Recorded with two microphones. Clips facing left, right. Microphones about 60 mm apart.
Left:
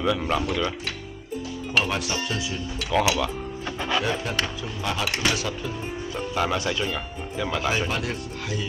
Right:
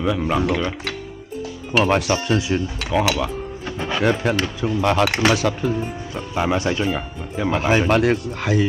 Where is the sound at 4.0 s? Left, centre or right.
Right.